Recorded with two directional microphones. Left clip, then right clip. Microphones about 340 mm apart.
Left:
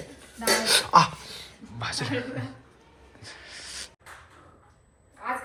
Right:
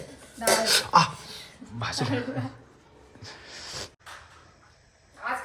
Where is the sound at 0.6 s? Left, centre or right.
Centre.